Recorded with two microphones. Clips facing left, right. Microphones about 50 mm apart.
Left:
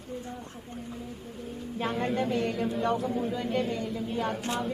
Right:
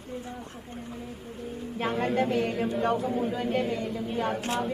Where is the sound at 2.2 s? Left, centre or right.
Centre.